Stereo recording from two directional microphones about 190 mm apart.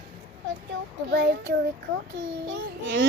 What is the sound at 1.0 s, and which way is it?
A child's voice, 75° right (ahead or behind).